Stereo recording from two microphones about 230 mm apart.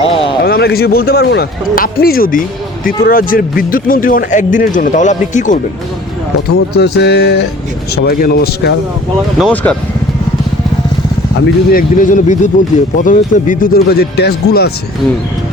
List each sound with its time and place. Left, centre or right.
0.0 s a sound: left
0.4 s speech: left
6.5 s speech: left
9.4 s speech: centre
11.3 s speech: left